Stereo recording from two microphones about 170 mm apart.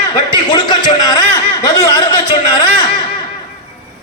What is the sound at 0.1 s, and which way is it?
Speech, 25° left (ahead or behind).